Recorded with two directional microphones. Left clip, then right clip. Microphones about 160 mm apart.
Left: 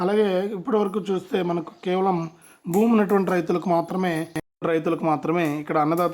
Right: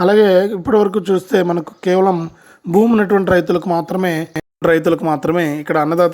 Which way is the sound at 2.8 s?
15° right (ahead or behind).